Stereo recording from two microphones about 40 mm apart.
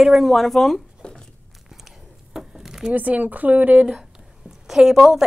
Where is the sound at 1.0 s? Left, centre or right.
Left.